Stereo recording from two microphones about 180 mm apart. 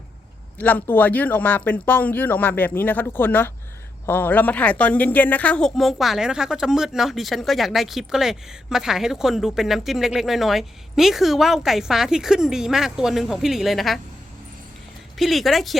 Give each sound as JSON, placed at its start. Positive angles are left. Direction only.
{"t": 0.6, "sound": "speech", "side_deg": 10}
{"t": 15.2, "sound": "speech", "side_deg": 0}